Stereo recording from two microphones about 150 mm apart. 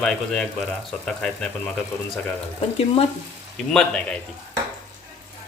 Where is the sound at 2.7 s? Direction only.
45° left (ahead or behind).